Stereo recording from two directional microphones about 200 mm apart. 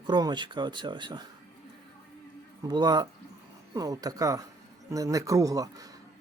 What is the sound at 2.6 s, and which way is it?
Speech, 20° right (ahead or behind).